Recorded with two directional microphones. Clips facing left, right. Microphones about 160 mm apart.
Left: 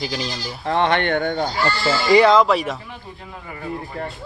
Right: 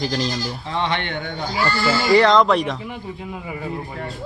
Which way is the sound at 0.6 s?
55° left (ahead or behind).